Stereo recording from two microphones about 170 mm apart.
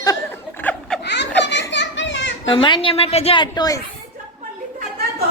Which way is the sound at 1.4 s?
90° left.